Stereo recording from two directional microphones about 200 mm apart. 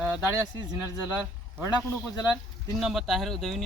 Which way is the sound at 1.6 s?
20° left (ahead or behind).